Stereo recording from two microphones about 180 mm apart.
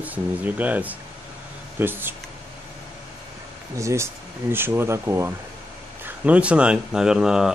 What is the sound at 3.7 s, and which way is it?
Speech, 15° right (ahead or behind).